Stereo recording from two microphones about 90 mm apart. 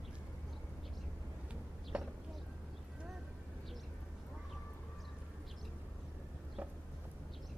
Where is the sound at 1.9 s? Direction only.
10° right (ahead or behind).